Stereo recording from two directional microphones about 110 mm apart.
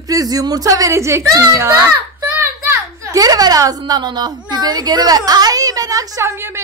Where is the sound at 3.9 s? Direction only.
40° right (ahead or behind).